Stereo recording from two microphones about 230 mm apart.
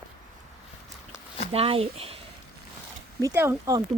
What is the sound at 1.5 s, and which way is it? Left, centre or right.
Speech, right.